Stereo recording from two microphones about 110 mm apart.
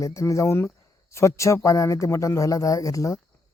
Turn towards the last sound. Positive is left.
turn(degrees=30)  # may be behind; listen again after turning